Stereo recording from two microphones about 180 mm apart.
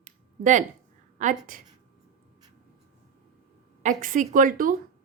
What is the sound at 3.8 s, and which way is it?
Speech, 45° right (ahead or behind).